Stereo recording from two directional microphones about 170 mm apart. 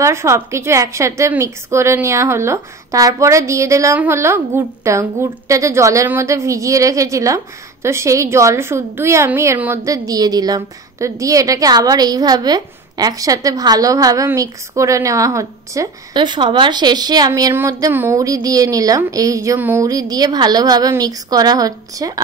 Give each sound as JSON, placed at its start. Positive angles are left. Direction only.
{"t": 0.0, "sound": "a woman's voice", "side_deg": -15}